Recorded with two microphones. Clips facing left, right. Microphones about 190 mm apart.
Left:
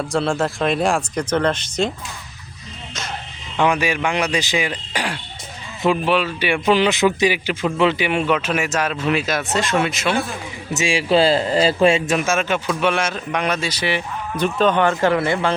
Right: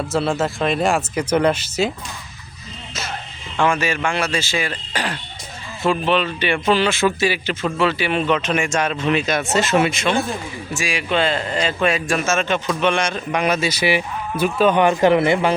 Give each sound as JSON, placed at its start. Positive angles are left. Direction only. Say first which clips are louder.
{"t": 0.1, "sound": "a man's voice", "louder": "even", "side_deg": -5}
{"t": 3.6, "sound": "speech", "louder": "left 1 dB", "side_deg": 15}
{"t": 10.8, "sound": "a man's voice", "louder": "left 5 dB", "side_deg": 30}